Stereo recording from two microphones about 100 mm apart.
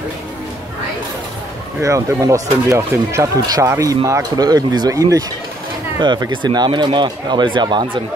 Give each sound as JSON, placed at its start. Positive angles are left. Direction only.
{"t": 1.8, "sound": "speech", "side_deg": -30}
{"t": 5.9, "sound": "speech", "side_deg": -50}